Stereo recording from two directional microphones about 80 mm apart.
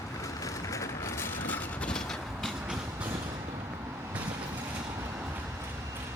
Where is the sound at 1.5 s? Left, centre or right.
Centre.